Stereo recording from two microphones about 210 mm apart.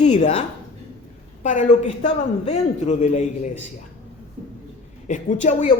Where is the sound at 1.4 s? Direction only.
35° left (ahead or behind).